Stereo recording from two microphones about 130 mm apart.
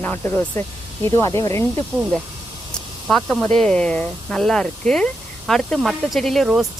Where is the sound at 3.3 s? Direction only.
5° left (ahead or behind).